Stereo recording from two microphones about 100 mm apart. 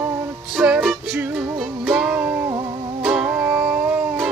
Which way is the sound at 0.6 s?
10° right (ahead or behind).